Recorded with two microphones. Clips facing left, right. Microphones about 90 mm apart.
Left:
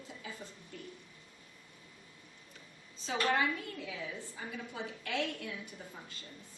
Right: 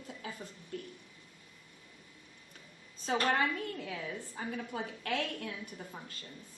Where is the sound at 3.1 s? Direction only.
45° right (ahead or behind).